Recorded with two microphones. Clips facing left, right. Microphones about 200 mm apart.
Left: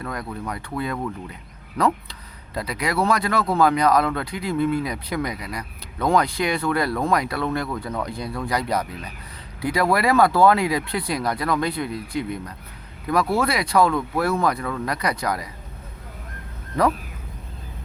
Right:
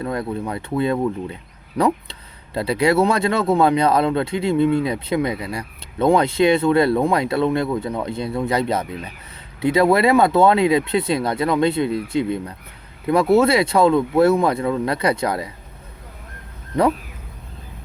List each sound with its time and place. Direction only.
0.0 s speech: 25° right (ahead or behind)